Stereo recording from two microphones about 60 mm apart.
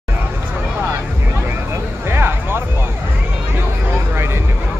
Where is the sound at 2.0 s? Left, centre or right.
Right.